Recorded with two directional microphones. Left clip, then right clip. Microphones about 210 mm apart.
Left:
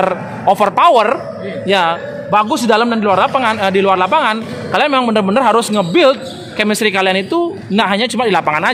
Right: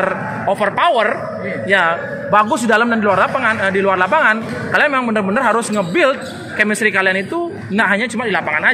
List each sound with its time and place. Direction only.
0.0 s a man's voice: 40° left (ahead or behind)